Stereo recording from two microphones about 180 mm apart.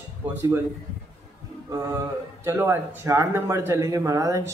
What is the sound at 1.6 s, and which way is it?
Speech, 15° right (ahead or behind).